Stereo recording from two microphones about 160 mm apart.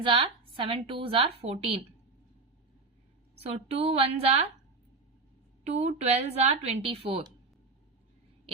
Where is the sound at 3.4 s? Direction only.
40° right (ahead or behind).